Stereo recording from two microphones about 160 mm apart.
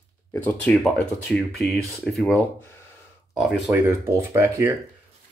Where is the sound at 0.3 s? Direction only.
10° left (ahead or behind).